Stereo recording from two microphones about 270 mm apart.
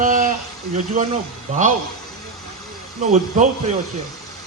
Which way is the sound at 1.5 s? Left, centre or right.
Right.